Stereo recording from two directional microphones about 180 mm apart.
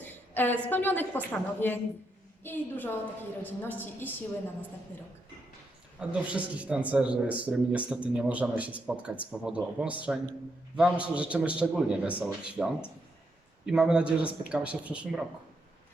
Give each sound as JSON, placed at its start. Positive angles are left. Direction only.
{"t": 0.0, "sound": "a woman's voice", "side_deg": 10}
{"t": 6.0, "sound": "a man's voice", "side_deg": -5}